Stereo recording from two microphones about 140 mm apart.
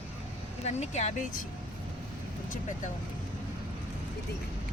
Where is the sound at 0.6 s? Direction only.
55° left (ahead or behind).